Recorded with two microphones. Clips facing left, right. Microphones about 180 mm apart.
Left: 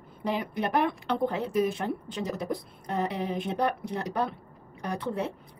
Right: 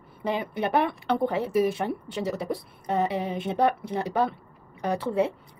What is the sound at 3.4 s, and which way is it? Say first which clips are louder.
Speech: right 6 dB; 65° right (ahead or behind).